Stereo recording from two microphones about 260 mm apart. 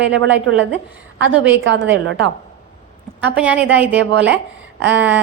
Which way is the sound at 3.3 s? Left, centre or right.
Centre.